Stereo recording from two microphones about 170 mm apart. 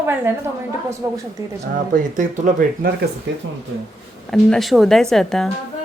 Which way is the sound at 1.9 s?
50° right (ahead or behind).